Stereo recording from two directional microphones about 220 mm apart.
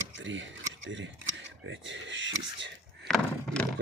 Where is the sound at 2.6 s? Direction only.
50° right (ahead or behind).